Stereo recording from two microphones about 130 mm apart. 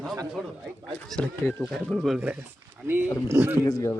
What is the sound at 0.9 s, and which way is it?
Speech, 5° left (ahead or behind).